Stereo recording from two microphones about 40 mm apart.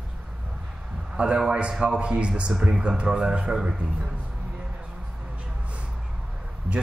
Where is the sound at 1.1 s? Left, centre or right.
Right.